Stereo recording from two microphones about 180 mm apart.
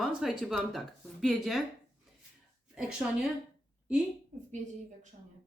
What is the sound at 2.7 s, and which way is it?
Speech, 5° right (ahead or behind).